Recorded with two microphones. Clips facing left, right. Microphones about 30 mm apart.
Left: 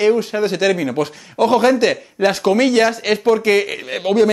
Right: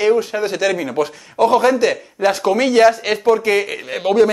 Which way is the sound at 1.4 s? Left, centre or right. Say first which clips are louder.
Even; centre.